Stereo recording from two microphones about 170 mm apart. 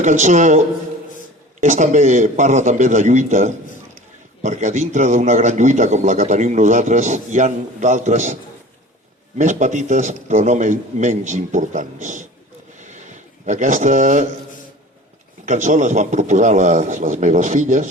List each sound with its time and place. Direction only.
0.0 s a man's voice: 45° right (ahead or behind)
1.6 s a man's voice: 45° right (ahead or behind)
9.4 s a man's voice: 45° right (ahead or behind)
12.8 s a sound: 45° right (ahead or behind)
15.4 s a man's voice: 45° right (ahead or behind)